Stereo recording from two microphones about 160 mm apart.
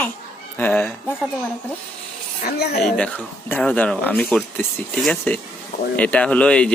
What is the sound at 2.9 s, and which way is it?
A man's voice, 10° left (ahead or behind).